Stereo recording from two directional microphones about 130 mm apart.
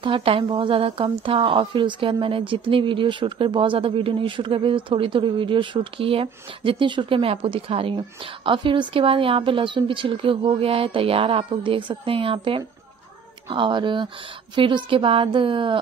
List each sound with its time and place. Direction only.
0.0 s a woman's voice: 45° right (ahead or behind)